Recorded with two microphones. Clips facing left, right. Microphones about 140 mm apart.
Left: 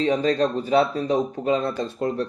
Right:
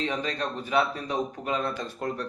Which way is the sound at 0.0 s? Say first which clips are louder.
Left 9 dB; 35° left (ahead or behind).